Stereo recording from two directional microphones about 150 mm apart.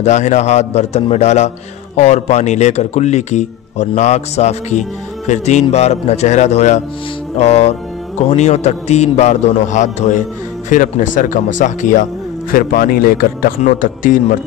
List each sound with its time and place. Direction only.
0.0 s speech: 50° left (ahead or behind)
12.5 s speech: 75° left (ahead or behind)
13.6 s speech: 60° left (ahead or behind)